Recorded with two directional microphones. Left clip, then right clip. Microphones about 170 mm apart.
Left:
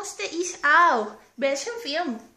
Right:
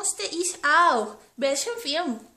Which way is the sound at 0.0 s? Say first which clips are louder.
Right 1 dB; 15° right (ahead or behind).